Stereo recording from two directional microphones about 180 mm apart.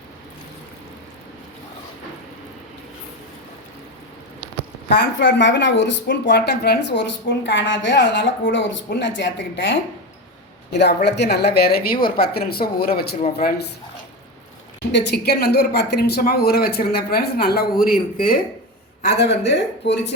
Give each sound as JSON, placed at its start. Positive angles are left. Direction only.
{"t": 4.9, "sound": "speech", "side_deg": 70}
{"t": 10.7, "sound": "speech", "side_deg": 70}
{"t": 14.9, "sound": "speech", "side_deg": 65}
{"t": 19.0, "sound": "speech", "side_deg": 65}